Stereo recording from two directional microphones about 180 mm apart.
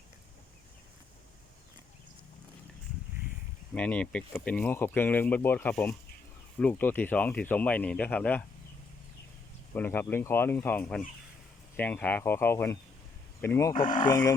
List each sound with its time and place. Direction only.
3.8 s speech: 5° left (ahead or behind)
9.7 s speech: 10° left (ahead or behind)